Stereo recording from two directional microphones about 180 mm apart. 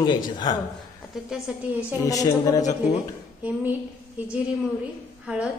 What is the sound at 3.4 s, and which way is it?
Speech, 5° right (ahead or behind).